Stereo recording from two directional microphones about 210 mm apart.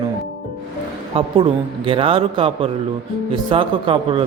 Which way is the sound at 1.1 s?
25° right (ahead or behind).